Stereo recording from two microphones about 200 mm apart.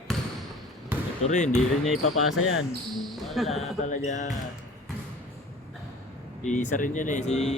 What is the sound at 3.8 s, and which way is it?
Speech, 35° left (ahead or behind).